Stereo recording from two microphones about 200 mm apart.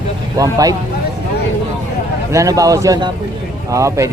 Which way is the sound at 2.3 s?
15° right (ahead or behind).